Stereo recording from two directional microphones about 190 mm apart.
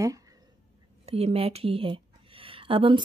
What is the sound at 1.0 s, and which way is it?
Speech, 30° right (ahead or behind).